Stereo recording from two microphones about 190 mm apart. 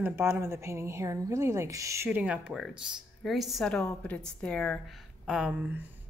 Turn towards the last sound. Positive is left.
turn(degrees=-10)  # may be behind; listen again after turning